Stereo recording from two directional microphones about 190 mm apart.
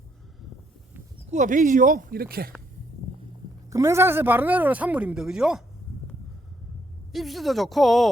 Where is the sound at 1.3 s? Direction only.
40° right (ahead or behind).